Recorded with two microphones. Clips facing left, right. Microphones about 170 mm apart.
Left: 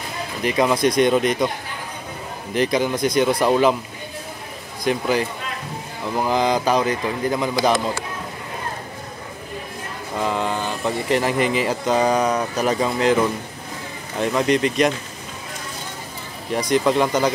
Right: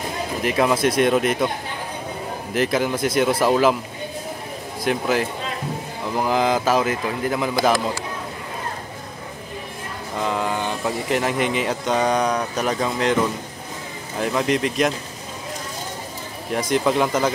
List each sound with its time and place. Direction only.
0.4 s speech: centre (ahead or behind)
2.5 s speech: centre (ahead or behind)
4.8 s speech: centre (ahead or behind)
10.1 s a sound: centre (ahead or behind)
10.8 s speech: centre (ahead or behind)
16.5 s speech: centre (ahead or behind)